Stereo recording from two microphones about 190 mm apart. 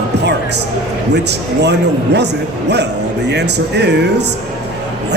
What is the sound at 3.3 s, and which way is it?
Speech, 65° right (ahead or behind).